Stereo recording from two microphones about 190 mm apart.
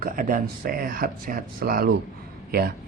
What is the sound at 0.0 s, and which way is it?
A man's voice, 45° right (ahead or behind).